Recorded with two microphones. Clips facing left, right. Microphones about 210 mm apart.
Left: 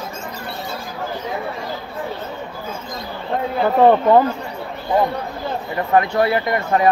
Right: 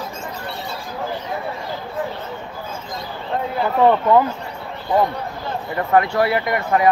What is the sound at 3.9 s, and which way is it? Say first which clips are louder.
Speech: left 2 dB; 35° left (ahead or behind).